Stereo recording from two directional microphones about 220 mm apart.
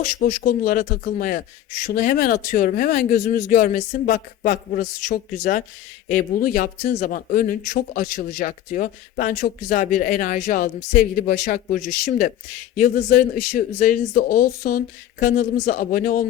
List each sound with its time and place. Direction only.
0.4 s speech: 40° left (ahead or behind)